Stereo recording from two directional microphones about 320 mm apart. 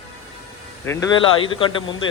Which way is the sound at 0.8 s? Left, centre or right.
Centre.